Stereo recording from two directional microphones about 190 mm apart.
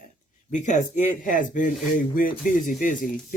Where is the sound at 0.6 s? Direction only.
40° left (ahead or behind).